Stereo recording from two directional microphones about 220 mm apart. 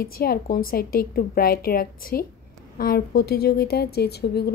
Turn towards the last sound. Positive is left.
turn(degrees=45)  # may be behind; listen again after turning